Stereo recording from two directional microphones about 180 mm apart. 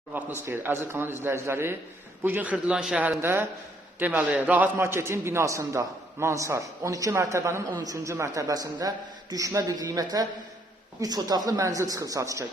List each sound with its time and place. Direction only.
0.1 s a man's voice: 10° right (ahead or behind)